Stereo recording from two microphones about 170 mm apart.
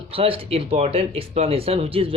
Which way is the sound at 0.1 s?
35° right (ahead or behind).